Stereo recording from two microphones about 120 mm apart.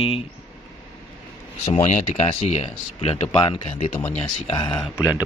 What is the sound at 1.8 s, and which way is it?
Speech, 90° left.